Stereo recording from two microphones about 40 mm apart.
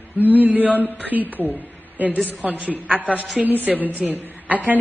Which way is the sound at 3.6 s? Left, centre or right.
Right.